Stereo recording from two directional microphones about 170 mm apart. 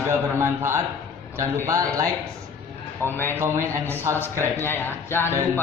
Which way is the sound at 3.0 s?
10° left (ahead or behind).